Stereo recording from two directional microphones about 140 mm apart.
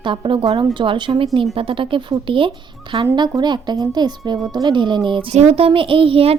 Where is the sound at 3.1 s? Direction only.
30° right (ahead or behind).